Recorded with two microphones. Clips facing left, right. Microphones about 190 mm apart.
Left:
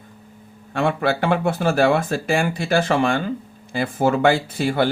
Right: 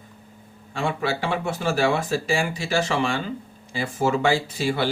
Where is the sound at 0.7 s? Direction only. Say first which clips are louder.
Left 5 dB; 60° left (ahead or behind).